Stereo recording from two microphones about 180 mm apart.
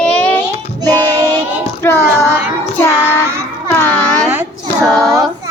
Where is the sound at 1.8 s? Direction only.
15° left (ahead or behind).